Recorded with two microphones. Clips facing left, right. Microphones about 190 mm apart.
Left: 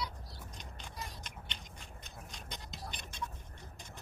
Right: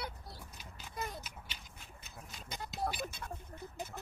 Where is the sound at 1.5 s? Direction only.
5° right (ahead or behind).